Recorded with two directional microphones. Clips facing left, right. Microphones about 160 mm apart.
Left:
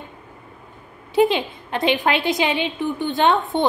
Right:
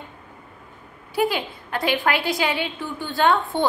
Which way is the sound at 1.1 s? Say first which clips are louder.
Left 5 dB; 20° left (ahead or behind).